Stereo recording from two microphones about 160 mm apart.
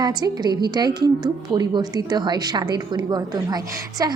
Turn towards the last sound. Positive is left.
turn(degrees=-25)  # may be behind; listen again after turning